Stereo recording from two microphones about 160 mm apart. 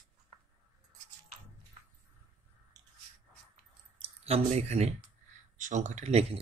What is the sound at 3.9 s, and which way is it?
Speech, 40° right (ahead or behind).